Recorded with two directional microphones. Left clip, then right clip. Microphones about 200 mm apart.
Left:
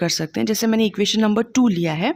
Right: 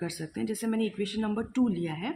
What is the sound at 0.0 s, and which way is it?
Speech, 55° left (ahead or behind).